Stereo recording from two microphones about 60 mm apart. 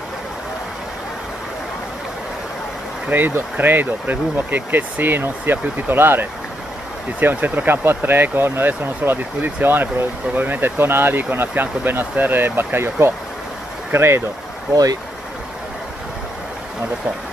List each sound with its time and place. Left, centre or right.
3.1 s speech: right